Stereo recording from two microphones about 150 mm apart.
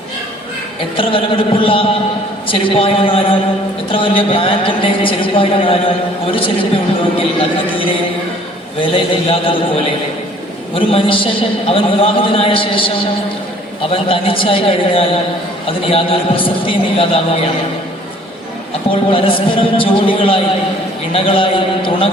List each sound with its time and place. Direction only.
0.9 s a man's voice: 35° left (ahead or behind)
18.9 s a man's voice: 35° left (ahead or behind)